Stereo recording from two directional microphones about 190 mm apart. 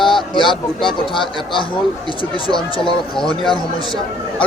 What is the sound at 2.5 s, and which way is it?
Speech, 25° left (ahead or behind).